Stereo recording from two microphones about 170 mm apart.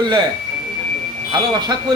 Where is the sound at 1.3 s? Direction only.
25° right (ahead or behind).